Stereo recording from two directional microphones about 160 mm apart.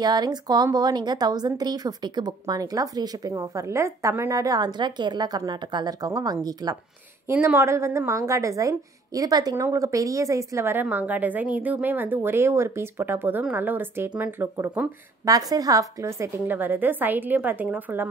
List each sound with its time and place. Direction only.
0.0 s speech: 25° right (ahead or behind)
7.2 s a woman's voice: 15° right (ahead or behind)